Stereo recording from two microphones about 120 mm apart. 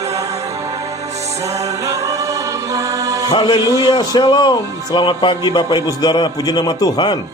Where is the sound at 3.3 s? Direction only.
40° left (ahead or behind).